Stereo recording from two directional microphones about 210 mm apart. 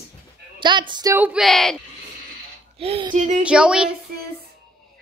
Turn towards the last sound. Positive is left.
turn(degrees=-5)  # may be behind; listen again after turning